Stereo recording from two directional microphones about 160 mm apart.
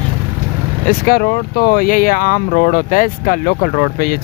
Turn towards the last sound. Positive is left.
turn(degrees=60)  # may be behind; listen again after turning